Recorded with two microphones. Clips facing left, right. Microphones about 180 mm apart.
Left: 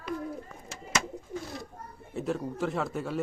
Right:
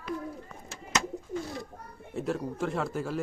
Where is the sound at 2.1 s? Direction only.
Centre (ahead or behind).